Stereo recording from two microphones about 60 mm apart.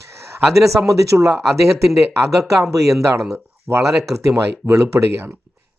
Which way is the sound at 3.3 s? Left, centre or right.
Right.